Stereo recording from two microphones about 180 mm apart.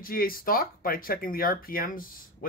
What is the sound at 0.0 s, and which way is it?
Speech, 55° left (ahead or behind).